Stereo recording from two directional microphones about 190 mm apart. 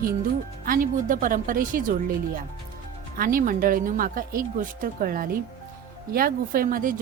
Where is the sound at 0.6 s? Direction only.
50° right (ahead or behind).